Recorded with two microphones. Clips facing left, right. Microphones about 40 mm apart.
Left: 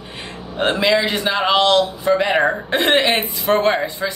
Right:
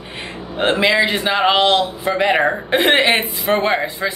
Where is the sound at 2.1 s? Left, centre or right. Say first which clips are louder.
Right 1 dB; centre.